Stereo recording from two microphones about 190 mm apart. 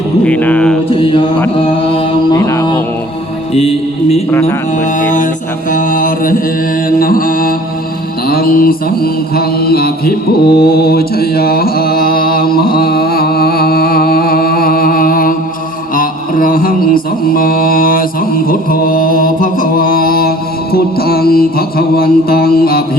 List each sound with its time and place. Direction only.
0.3 s music: 10° left (ahead or behind)
0.9 s mantra: 25° left (ahead or behind)
2.4 s mantra: 15° left (ahead or behind)
3.5 s mantra: 30° left (ahead or behind)
4.3 s music: 15° left (ahead or behind)
4.9 s mantra: 40° left (ahead or behind)